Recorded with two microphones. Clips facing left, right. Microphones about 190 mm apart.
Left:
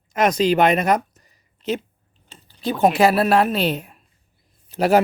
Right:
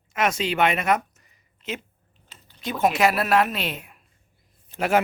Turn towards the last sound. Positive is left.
turn(degrees=35)  # may be behind; listen again after turning